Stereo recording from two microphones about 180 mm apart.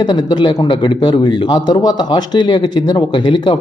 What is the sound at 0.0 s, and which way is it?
Speech, 25° left (ahead or behind).